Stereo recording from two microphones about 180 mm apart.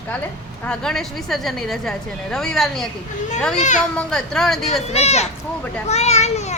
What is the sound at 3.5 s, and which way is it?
Speech, 40° left (ahead or behind).